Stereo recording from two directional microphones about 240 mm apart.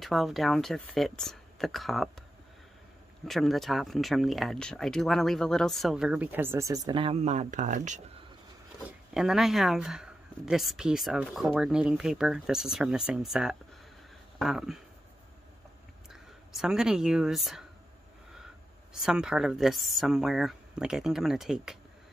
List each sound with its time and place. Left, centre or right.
0.0 s speech: centre
3.3 s speech: centre; by 8.0 s right
8.8 s speech: centre
16.1 s speech: centre
19.0 s speech: centre